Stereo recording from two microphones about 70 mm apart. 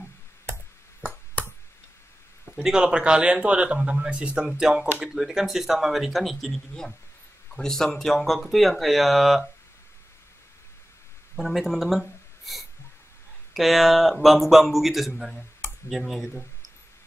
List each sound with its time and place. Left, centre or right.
2.5 s a man's voice: centre
11.3 s speech: centre